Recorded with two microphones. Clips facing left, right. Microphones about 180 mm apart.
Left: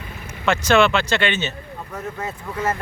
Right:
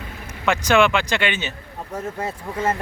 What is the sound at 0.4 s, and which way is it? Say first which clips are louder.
Speech: left 1 dB; 15° right (ahead or behind).